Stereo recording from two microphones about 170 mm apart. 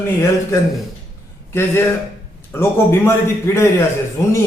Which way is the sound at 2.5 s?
15° left (ahead or behind).